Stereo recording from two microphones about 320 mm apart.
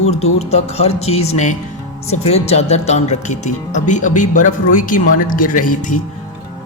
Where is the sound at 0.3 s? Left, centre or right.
Centre.